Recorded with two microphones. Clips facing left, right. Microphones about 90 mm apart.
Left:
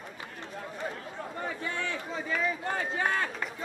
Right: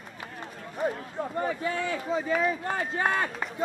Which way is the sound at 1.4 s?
5° right (ahead or behind).